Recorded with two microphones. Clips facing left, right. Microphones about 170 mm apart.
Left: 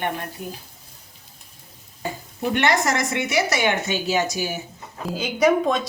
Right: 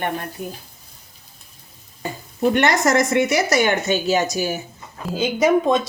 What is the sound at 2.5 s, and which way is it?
Speech, 45° right (ahead or behind).